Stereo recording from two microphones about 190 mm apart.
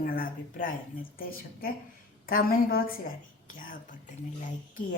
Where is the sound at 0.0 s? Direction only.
50° left (ahead or behind).